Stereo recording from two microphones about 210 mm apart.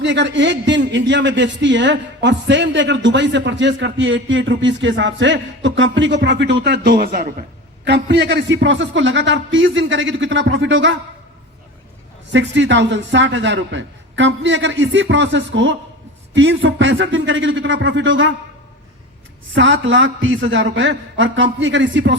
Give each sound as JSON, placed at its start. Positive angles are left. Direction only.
{"t": 0.0, "sound": "a man's voice", "side_deg": -60}
{"t": 12.3, "sound": "a man's voice", "side_deg": -60}
{"t": 19.5, "sound": "a man's voice", "side_deg": -65}